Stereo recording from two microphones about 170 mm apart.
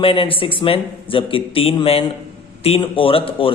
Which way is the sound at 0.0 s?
30° left (ahead or behind).